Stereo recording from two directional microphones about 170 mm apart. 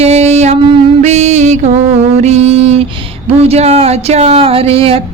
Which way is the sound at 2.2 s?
40° right (ahead or behind).